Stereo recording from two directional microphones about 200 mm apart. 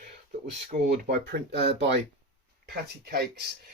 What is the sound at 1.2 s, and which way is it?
Speech, 55° right (ahead or behind).